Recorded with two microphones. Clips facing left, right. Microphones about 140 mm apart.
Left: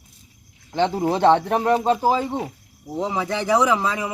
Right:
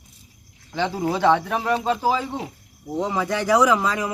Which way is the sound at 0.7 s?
20° left (ahead or behind).